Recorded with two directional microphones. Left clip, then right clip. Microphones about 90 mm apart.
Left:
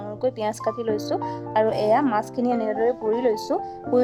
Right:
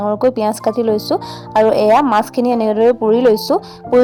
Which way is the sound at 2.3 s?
75° right (ahead or behind).